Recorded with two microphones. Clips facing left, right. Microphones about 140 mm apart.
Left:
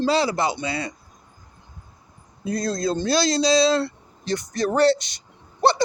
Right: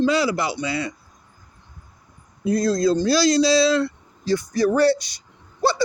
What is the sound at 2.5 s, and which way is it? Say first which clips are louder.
Speech: right 5 dB; 25° left (ahead or behind).